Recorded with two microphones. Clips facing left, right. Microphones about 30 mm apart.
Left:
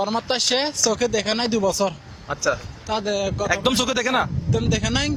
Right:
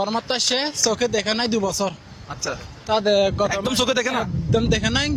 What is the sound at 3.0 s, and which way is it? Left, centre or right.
Speech, right.